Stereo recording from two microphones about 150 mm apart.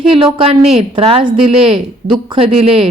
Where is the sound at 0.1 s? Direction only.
35° right (ahead or behind).